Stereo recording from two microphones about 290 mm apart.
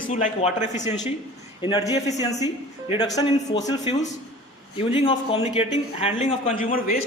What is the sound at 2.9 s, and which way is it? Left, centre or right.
A woman's voice, centre.